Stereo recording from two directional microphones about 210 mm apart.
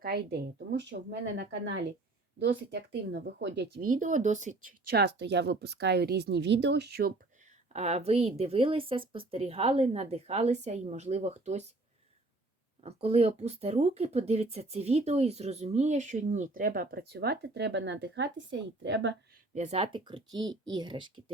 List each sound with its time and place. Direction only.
0.0 s speech: 50° right (ahead or behind)
4.9 s speech: 55° right (ahead or behind)
7.7 s speech: 30° right (ahead or behind)
12.8 s speech: 30° right (ahead or behind); by 19.1 s 60° right (ahead or behind)
19.5 s speech: 30° right (ahead or behind)